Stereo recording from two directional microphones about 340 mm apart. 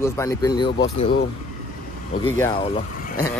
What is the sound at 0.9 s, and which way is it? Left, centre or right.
Speech, left.